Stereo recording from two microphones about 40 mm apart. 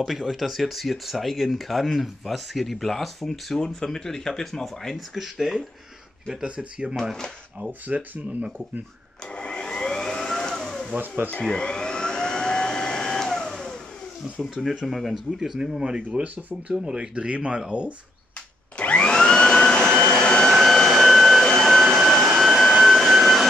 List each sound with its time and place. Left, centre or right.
0.0 s speech: centre
5.1 s speech: centre
6.4 s speech: right
9.3 s vacuum cleaner: left
11.4 s vehicle: centre
14.4 s speech: centre
15.8 s speech: centre
16.3 s speech: right
16.8 s speech: right
18.8 s vacuum cleaner: left
19.0 s vacuum cleaner: left
20.9 s vacuum cleaner: centre